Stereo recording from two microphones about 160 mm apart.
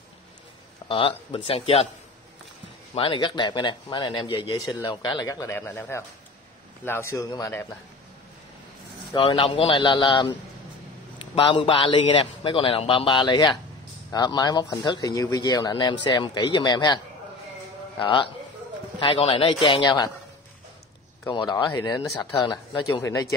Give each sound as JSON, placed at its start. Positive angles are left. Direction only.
{"t": 0.8, "sound": "a man's voice", "side_deg": 30}
{"t": 2.9, "sound": "speech", "side_deg": 35}
{"t": 9.1, "sound": "a man's voice", "side_deg": 30}
{"t": 21.3, "sound": "speech", "side_deg": 30}